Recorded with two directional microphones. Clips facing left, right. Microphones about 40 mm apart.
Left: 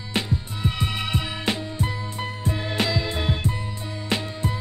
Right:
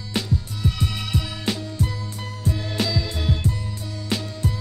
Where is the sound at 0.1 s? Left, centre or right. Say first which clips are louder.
Even; left.